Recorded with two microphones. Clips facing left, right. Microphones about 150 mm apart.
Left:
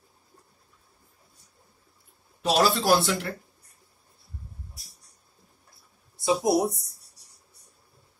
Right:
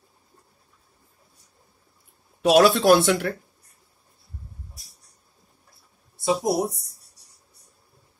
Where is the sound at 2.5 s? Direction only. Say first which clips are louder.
Right 6 dB; 70° right (ahead or behind).